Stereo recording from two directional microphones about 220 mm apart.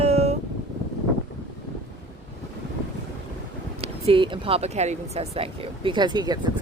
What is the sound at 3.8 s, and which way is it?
Speech, 25° right (ahead or behind).